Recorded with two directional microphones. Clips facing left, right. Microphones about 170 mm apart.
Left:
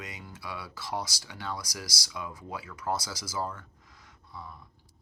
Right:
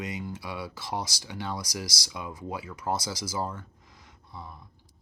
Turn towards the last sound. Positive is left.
turn(degrees=-20)  # may be behind; listen again after turning